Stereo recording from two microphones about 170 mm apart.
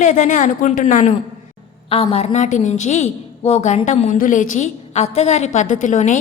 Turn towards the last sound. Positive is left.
turn(degrees=45)  # may be behind; listen again after turning